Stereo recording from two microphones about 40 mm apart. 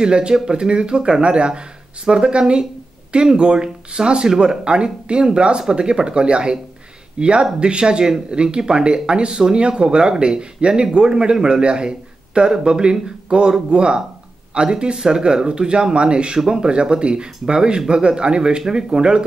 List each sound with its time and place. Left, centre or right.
0.0 s speech: right